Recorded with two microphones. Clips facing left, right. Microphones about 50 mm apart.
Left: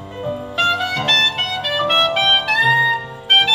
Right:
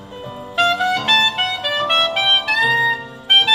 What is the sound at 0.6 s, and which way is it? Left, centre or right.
Music, centre.